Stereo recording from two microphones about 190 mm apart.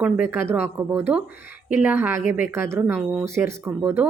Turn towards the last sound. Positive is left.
turn(degrees=-10)  # may be behind; listen again after turning